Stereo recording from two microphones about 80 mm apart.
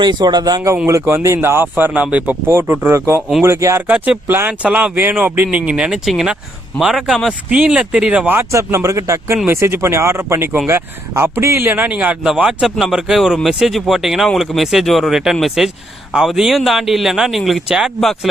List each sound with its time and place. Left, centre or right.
0.0 s a man's voice: right
1.0 s speech: right
1.7 s speech: centre
2.5 s speech: right
3.8 s speech: centre
4.3 s a man's voice: right
8.3 s a man's voice: right; by 18.3 s centre